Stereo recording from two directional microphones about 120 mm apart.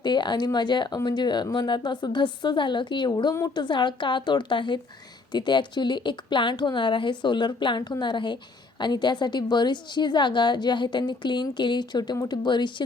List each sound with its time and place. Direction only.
0.0 s a woman's voice: 40° left (ahead or behind)